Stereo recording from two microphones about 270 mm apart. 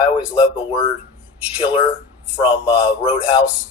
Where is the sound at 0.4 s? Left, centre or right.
Centre.